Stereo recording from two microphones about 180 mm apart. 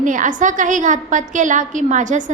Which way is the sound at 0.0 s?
45° right (ahead or behind).